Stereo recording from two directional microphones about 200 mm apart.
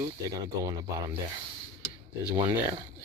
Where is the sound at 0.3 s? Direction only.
15° right (ahead or behind).